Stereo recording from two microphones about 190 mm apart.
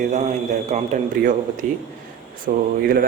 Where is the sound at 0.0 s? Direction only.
40° right (ahead or behind).